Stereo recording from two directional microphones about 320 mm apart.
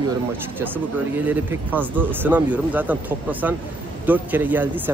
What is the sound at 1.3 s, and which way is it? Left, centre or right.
Speech, centre.